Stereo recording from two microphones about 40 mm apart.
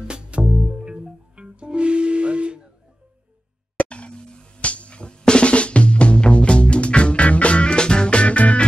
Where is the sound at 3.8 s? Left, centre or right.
Left.